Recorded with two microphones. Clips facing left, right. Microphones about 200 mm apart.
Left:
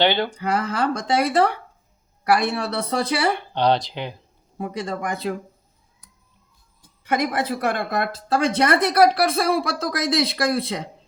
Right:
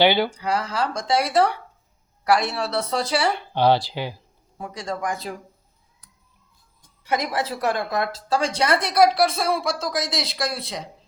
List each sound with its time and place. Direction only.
0.0 s speech: 10° right (ahead or behind)
0.3 s a woman's voice: 55° left (ahead or behind)
3.5 s speech: 5° right (ahead or behind)
4.6 s a woman's voice: 60° left (ahead or behind)
7.1 s a woman's voice: 55° left (ahead or behind)